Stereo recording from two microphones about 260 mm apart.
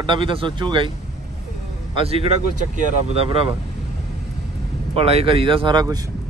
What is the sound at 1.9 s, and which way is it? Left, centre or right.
Speech, right.